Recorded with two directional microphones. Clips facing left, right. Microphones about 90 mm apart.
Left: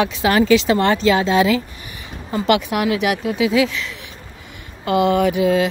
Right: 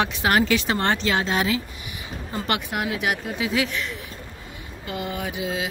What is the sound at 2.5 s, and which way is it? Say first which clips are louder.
A woman's voice: left 9 dB; 90° left.